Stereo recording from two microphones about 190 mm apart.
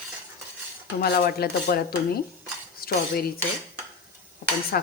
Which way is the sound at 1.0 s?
55° left (ahead or behind).